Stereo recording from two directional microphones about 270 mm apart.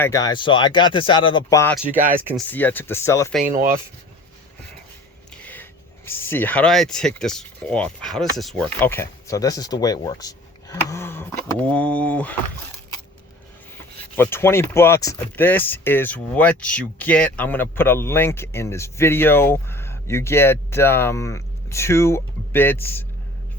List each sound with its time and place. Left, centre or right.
0.0 s speech: centre
1.9 s speech: centre
2.5 s speech: centre
3.4 s speech: right
5.4 s a sound: centre
6.1 s speech: centre
14.2 s speech: centre